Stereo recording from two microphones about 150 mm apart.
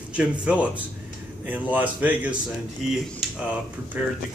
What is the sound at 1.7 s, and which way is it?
Speech, 10° right (ahead or behind).